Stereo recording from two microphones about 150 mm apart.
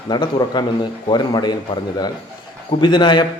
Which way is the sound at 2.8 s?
30° left (ahead or behind).